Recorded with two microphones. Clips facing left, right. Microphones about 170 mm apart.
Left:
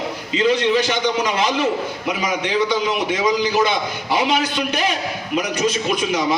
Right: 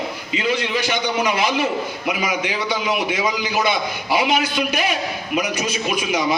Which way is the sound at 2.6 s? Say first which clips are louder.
Left 2 dB; 10° right (ahead or behind).